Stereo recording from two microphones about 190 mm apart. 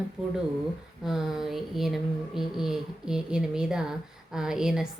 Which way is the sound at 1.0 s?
Centre (ahead or behind).